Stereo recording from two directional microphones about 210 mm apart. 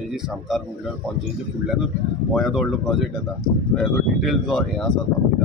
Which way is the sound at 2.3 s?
Centre (ahead or behind).